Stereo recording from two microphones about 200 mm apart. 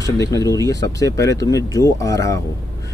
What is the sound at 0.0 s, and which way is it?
Speech, 15° left (ahead or behind).